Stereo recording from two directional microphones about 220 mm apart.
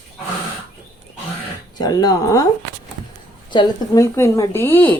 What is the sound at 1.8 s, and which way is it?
Speech, 20° left (ahead or behind).